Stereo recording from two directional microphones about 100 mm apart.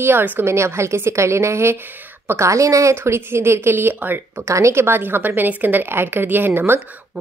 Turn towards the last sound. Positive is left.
turn(degrees=-15)  # may be behind; listen again after turning